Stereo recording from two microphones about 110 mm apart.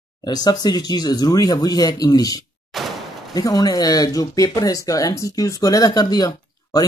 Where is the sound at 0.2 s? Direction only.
40° left (ahead or behind).